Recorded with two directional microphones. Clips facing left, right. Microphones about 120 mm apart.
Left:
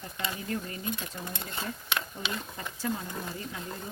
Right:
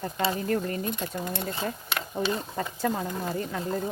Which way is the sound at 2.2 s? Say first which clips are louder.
Right 7 dB; 35° right (ahead or behind).